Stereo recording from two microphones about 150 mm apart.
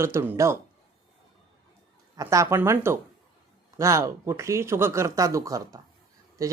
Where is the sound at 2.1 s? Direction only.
20° right (ahead or behind).